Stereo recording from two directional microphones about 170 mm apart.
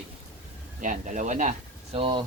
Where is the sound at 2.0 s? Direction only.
30° right (ahead or behind).